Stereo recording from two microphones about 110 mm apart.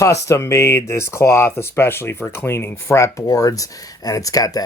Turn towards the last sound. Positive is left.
turn(degrees=35)  # may be behind; listen again after turning